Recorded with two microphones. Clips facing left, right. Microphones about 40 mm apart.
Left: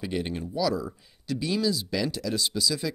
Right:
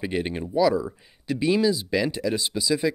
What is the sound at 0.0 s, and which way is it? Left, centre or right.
Speech, right.